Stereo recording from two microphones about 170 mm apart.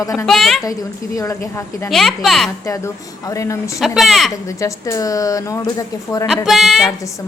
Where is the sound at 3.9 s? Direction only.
Centre (ahead or behind).